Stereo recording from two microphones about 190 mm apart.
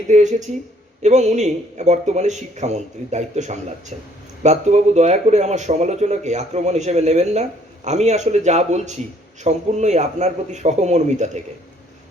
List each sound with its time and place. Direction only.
0.1 s a man's voice: 40° right (ahead or behind)